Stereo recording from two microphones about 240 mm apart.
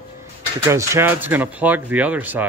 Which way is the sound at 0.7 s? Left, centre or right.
Centre.